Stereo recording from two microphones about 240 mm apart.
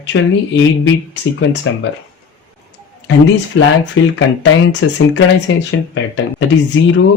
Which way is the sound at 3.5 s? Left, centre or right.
Left.